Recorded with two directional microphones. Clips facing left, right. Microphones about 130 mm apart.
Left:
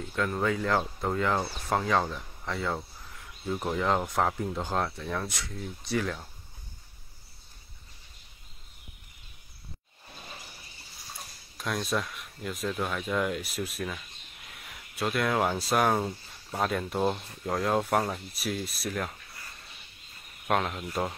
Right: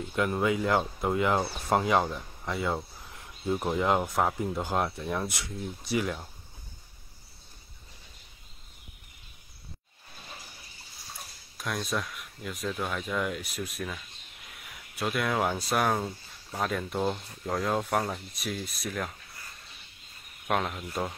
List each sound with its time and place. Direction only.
0.1 s speech: 15° right (ahead or behind)
3.1 s a sound: 25° right (ahead or behind)
3.5 s speech: 10° right (ahead or behind)
11.1 s speech: centre (ahead or behind)
20.4 s speech: centre (ahead or behind)